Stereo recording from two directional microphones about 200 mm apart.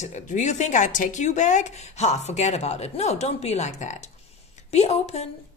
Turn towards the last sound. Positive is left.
turn(degrees=30)  # may be behind; listen again after turning